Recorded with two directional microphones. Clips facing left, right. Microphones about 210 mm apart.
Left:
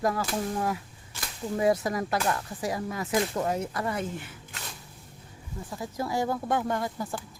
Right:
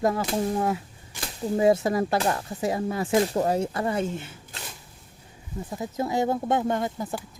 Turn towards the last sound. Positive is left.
turn(degrees=-20)  # may be behind; listen again after turning